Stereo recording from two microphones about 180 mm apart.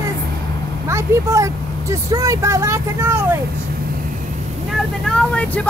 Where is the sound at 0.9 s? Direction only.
15° right (ahead or behind).